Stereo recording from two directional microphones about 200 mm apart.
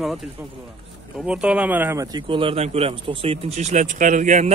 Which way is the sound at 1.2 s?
5° right (ahead or behind).